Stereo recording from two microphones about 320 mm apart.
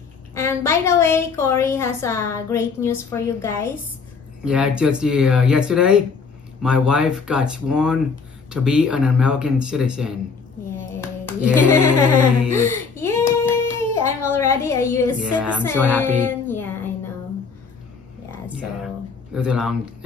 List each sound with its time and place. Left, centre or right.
0.3 s a woman's voice: centre
4.5 s speech: centre
11.7 s music: right
12.9 s child singing: centre
14.3 s a woman's voice: centre
15.1 s speech: centre
15.6 s child singing: centre
19.3 s speech: centre